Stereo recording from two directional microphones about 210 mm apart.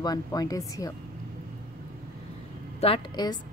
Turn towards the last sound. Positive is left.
turn(degrees=20)  # may be behind; listen again after turning